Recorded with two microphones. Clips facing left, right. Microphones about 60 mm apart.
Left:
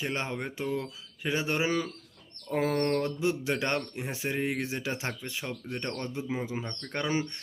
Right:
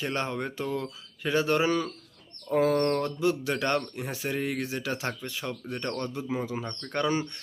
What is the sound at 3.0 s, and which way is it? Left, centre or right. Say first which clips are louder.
A man's voice: right 2 dB; left.